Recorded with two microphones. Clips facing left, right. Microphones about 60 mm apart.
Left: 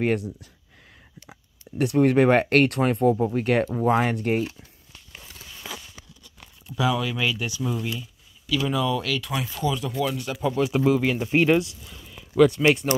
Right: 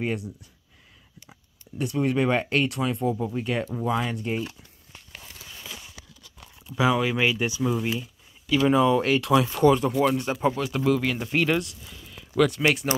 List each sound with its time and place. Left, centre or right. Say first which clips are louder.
0.0 s speech: left 5 dB; left
1.8 s speech: left 6 dB; left
3.7 s speech: left 5 dB; left
6.8 s speech: right 2 dB; right
9.2 s speech: right 8 dB; right
9.6 s speech: right 3 dB; right
10.6 s speech: left 3 dB; centre